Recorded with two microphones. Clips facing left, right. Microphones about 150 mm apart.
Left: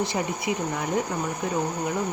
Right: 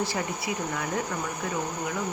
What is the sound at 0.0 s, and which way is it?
A woman's voice, 20° left (ahead or behind).